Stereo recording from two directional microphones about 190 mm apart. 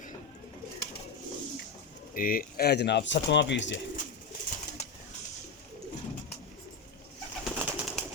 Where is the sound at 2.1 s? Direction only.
50° left (ahead or behind); by 3.8 s 65° left (ahead or behind).